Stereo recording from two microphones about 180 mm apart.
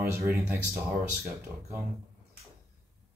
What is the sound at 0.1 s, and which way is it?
Speech, 15° right (ahead or behind).